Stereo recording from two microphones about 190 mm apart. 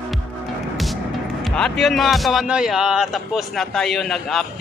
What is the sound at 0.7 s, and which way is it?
Speech, centre (ahead or behind).